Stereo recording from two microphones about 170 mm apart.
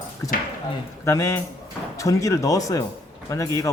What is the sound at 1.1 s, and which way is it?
Speech, 15° left (ahead or behind).